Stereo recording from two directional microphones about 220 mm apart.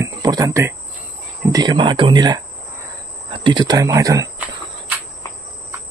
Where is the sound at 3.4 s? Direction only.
20° right (ahead or behind).